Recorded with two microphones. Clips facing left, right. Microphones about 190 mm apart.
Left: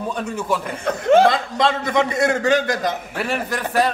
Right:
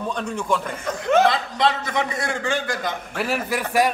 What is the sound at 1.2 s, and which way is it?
A man's voice, 45° left (ahead or behind).